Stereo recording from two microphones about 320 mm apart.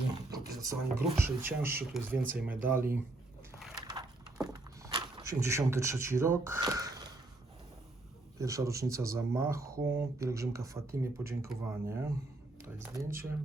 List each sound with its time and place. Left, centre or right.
0.3 s speech: centre
3.6 s a sound: centre
8.4 s speech: centre